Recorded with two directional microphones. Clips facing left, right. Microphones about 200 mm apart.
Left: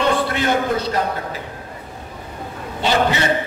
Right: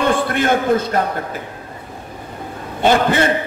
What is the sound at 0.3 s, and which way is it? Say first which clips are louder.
A man's voice: right 3 dB; 50° right (ahead or behind).